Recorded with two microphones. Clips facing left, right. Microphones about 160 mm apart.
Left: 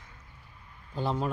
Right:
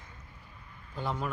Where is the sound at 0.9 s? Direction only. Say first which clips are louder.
Left 4 dB; 30° left (ahead or behind).